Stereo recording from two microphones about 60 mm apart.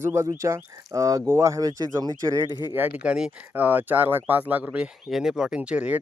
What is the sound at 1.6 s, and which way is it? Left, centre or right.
Speech, right.